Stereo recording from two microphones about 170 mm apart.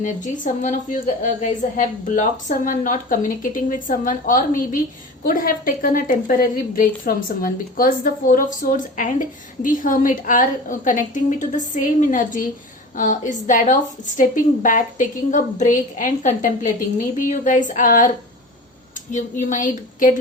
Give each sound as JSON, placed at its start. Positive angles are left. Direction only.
{"t": 0.0, "sound": "a woman's voice", "side_deg": 50}
{"t": 19.1, "sound": "a woman's voice", "side_deg": 50}